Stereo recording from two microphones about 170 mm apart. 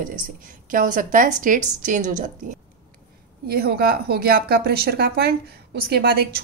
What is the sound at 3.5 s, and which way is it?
Speech, 65° right (ahead or behind).